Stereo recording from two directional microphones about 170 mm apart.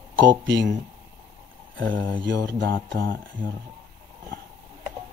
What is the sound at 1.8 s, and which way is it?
Speech, 75° right (ahead or behind).